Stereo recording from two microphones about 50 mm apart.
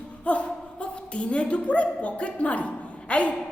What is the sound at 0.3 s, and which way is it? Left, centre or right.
A woman's voice, left.